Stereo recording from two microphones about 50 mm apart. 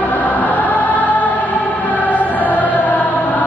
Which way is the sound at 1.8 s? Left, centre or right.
Left.